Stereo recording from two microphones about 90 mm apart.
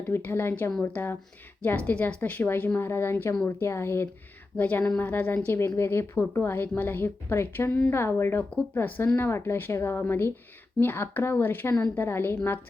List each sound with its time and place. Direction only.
0.0 s a woman's voice: 25° left (ahead or behind)